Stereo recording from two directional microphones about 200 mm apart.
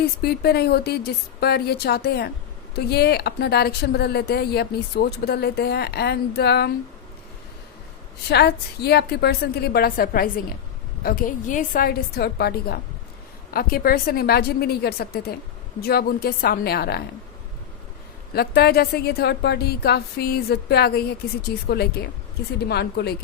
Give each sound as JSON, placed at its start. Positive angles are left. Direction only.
{"t": 0.0, "sound": "speech", "side_deg": 50}
{"t": 8.3, "sound": "speech", "side_deg": 55}
{"t": 18.3, "sound": "speech", "side_deg": 50}